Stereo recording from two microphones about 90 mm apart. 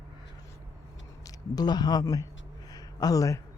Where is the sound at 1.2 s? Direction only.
45° left (ahead or behind).